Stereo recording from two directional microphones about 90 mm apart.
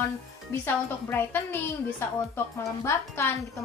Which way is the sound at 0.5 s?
25° left (ahead or behind).